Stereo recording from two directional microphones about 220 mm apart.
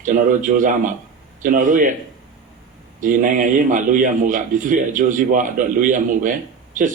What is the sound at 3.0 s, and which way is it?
Speech, 35° right (ahead or behind).